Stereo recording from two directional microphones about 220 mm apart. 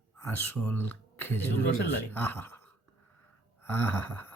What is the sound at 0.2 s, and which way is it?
Speech, 10° left (ahead or behind).